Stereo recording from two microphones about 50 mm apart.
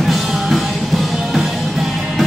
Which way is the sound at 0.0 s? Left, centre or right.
Centre.